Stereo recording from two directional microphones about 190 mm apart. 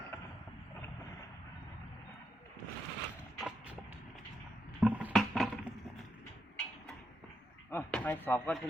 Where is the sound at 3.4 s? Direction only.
5° right (ahead or behind).